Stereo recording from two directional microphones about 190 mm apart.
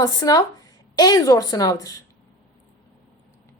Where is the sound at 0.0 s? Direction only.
20° left (ahead or behind).